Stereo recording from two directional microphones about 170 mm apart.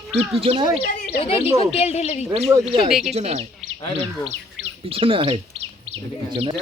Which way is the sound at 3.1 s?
40° right (ahead or behind).